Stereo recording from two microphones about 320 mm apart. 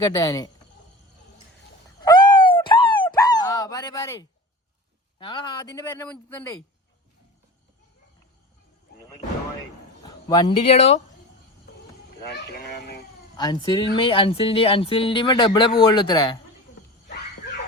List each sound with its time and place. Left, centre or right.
0.0 s speech: centre
2.0 s a sound: centre
5.2 s speech: centre
10.0 s speech: centre
12.3 s speech: left
13.3 s speech: centre